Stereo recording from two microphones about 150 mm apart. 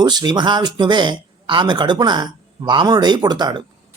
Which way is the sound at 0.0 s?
30° right (ahead or behind).